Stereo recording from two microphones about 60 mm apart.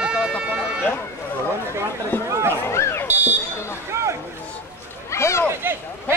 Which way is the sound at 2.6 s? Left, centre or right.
Left.